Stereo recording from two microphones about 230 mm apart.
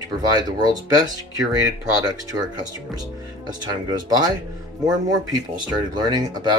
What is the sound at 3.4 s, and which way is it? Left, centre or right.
Speech, centre.